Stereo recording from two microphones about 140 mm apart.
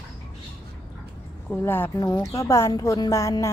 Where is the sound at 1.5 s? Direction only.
15° left (ahead or behind).